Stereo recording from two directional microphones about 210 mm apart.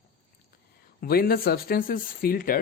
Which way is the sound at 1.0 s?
45° left (ahead or behind).